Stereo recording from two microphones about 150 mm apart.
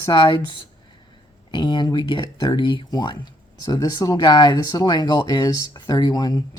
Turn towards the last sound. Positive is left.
turn(degrees=25)  # may be behind; listen again after turning